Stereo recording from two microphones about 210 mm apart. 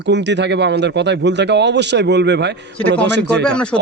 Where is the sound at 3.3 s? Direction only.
5° left (ahead or behind).